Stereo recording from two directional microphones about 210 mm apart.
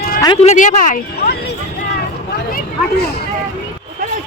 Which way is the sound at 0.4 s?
35° left (ahead or behind).